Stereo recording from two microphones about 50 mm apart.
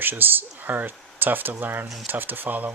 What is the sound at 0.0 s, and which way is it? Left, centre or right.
Speech, right.